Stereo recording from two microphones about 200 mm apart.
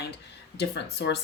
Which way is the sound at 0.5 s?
55° left (ahead or behind).